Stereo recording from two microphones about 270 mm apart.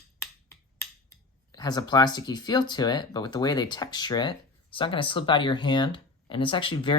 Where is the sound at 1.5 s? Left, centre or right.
Centre.